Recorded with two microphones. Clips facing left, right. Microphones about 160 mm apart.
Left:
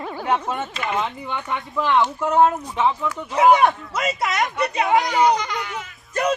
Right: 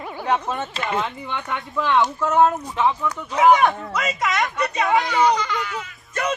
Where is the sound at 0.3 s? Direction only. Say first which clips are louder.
Even; 10° left (ahead or behind).